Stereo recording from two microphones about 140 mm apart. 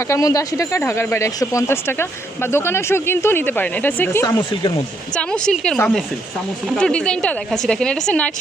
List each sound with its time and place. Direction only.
0.0 s a woman's voice: 20° left (ahead or behind); by 8.3 s 5° left (ahead or behind)